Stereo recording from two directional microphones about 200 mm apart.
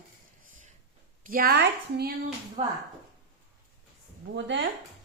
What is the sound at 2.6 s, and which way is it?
Speech, 25° right (ahead or behind).